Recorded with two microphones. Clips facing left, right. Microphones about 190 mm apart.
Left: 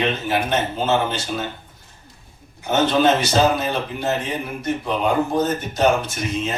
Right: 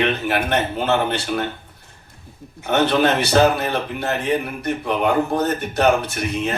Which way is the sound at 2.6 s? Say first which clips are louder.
Even; 60° right (ahead or behind).